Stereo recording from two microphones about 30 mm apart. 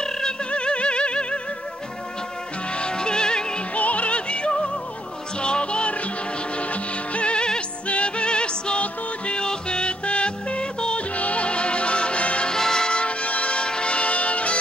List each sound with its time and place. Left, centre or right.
0.5 s music: left
2.7 s music: left
3.7 s music: left
6.5 s music: left
7.8 s music: left
11.0 s music: left
12.4 s music: left
12.9 s music: left